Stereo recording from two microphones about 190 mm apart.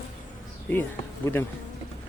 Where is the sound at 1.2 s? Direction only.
10° left (ahead or behind).